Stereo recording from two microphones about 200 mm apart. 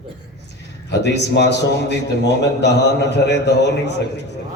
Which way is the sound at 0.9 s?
60° left (ahead or behind).